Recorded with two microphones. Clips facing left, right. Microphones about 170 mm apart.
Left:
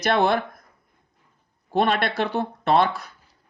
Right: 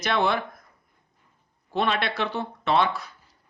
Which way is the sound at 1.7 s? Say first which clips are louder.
Left 4 dB; 50° left (ahead or behind).